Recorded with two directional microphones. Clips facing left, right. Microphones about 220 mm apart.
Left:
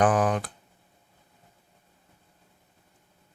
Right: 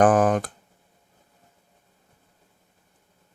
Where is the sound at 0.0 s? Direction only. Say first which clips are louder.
Right 5 dB; 50° right (ahead or behind).